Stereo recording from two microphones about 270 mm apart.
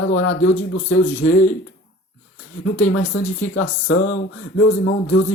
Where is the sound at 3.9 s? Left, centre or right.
Left.